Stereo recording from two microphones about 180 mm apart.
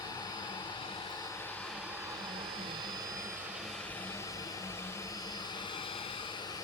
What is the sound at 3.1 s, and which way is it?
Vehicle, 15° right (ahead or behind).